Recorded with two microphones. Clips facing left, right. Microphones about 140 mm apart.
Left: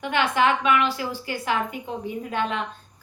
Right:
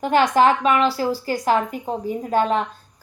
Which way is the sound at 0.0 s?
40° right (ahead or behind).